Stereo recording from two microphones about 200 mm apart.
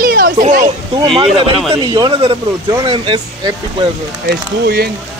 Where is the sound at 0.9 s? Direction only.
25° right (ahead or behind).